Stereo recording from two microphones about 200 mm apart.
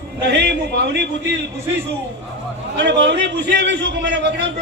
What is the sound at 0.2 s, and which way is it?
A man's voice, 60° right (ahead or behind).